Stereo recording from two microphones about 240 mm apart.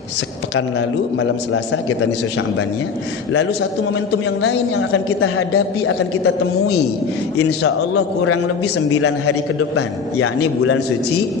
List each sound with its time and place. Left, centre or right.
0.5 s a man's voice: left
4.4 s a man's voice: left